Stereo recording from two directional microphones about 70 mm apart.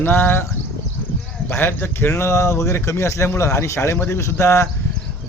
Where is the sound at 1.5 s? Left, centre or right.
Left.